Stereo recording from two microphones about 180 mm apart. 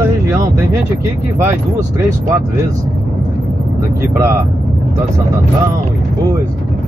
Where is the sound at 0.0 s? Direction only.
15° right (ahead or behind).